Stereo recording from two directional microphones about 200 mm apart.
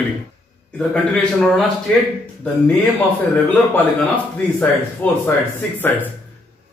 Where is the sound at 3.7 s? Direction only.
5° left (ahead or behind).